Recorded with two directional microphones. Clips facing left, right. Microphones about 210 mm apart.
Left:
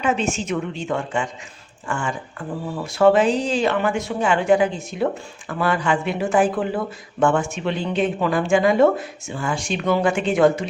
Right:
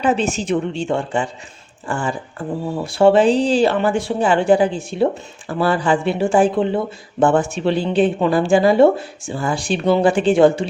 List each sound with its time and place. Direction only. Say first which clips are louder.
0.0 s speech: right 3 dB; 35° right (ahead or behind)